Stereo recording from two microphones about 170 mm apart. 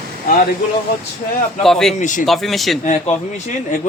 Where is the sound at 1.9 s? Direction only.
45° left (ahead or behind).